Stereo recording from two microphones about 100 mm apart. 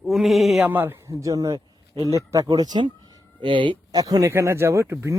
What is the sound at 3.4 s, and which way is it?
Speech, 55° right (ahead or behind).